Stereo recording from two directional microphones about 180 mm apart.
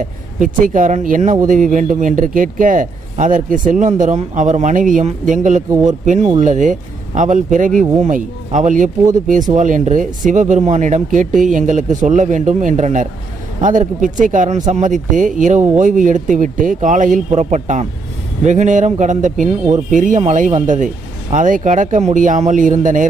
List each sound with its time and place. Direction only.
0.0 s speech: 45° right (ahead or behind)